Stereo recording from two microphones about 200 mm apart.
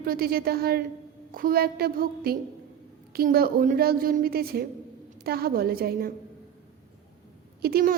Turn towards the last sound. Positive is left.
turn(degrees=-50)  # may be behind; listen again after turning